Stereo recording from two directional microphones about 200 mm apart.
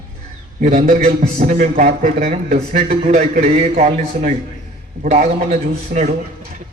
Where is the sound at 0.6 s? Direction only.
35° right (ahead or behind).